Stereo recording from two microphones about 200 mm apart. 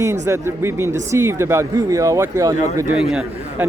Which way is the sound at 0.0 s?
15° right (ahead or behind).